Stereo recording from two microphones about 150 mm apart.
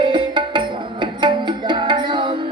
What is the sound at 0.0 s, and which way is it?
Music, 30° right (ahead or behind).